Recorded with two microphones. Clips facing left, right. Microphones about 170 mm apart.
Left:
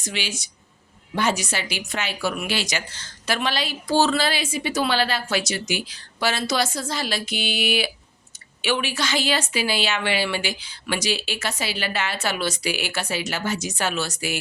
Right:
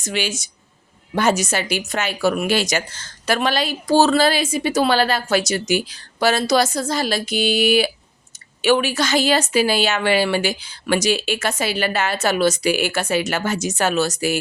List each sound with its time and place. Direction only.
0.0 s a woman's voice: 45° right (ahead or behind)